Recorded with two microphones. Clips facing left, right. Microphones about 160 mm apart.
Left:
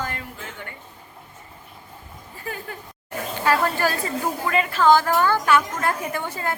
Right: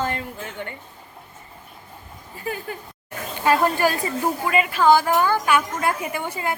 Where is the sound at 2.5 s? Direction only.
20° right (ahead or behind).